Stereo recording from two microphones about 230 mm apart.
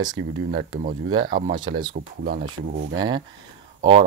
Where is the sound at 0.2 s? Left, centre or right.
Right.